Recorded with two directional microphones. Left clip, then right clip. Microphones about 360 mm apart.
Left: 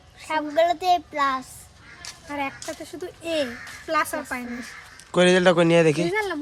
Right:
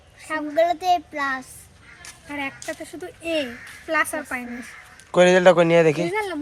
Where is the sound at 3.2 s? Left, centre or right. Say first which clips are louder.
Right 1 dB; centre.